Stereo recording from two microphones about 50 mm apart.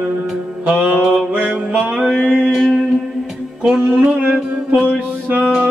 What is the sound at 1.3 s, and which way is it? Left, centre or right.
Music, right.